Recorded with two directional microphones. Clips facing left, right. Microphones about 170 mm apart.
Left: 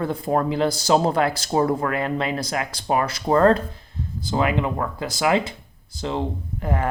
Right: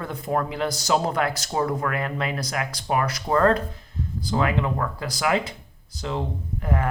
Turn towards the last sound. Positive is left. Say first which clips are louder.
# left 1 dB
turn(degrees=30)  # may be behind; listen again after turning